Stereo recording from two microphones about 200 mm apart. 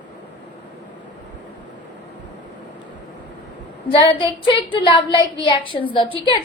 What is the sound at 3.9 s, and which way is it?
A woman's voice, 25° left (ahead or behind).